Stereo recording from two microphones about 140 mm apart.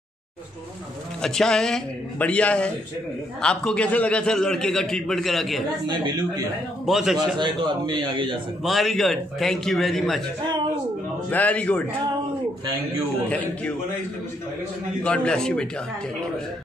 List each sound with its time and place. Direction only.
1.2 s a man's voice: 5° left (ahead or behind)
6.9 s a man's voice: centre (ahead or behind)
7.3 s a man's voice: 35° right (ahead or behind)
8.6 s a man's voice: centre (ahead or behind)
10.4 s a man's voice: 30° right (ahead or behind)
11.2 s a man's voice: 10° left (ahead or behind)
13.3 s a man's voice: 10° left (ahead or behind)
15.0 s a man's voice: 5° left (ahead or behind)